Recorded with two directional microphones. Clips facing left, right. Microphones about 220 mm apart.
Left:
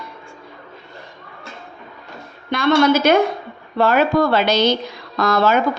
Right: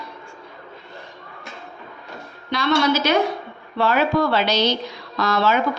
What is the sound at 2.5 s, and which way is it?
Speech, 50° left (ahead or behind).